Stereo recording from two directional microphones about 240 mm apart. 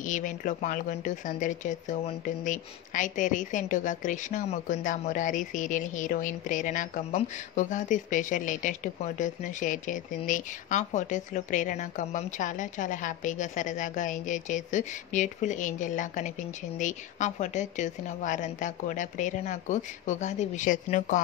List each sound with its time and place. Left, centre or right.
0.0 s speech: left